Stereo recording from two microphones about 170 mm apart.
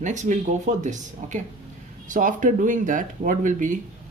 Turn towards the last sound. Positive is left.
turn(degrees=-50)  # may be behind; listen again after turning